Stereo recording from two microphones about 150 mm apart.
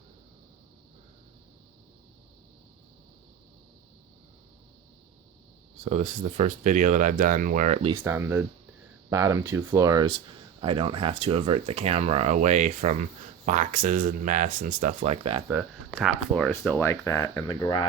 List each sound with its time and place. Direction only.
5.8 s speech: 50° right (ahead or behind)
7.9 s speech: 15° right (ahead or behind)
10.6 s speech: 35° right (ahead or behind)
15.4 s speech: 5° right (ahead or behind)
16.5 s speech: 15° left (ahead or behind); by 17.8 s 30° left (ahead or behind)